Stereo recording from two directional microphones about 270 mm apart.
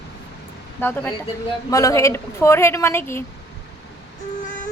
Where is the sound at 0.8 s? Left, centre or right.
Centre.